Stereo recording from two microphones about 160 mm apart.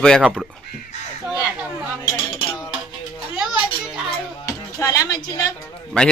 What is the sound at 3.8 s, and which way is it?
Music, 5° right (ahead or behind).